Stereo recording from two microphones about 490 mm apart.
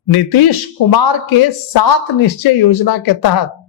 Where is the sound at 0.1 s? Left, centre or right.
Left.